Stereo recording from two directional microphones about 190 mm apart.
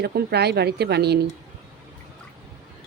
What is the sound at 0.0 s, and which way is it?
Speech, 55° right (ahead or behind).